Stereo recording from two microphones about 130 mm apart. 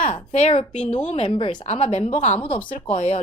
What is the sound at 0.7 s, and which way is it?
Speech, 60° left (ahead or behind).